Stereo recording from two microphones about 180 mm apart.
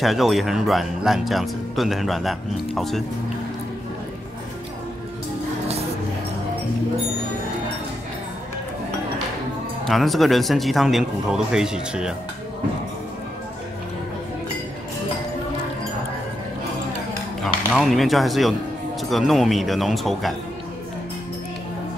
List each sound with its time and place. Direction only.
0.0 s speech: centre (ahead or behind)
9.8 s speech: centre (ahead or behind)
17.4 s speech: centre (ahead or behind)